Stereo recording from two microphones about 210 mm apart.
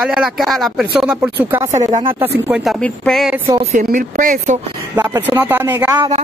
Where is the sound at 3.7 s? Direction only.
40° right (ahead or behind).